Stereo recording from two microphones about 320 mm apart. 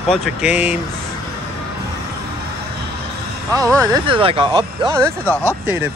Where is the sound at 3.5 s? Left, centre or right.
Centre.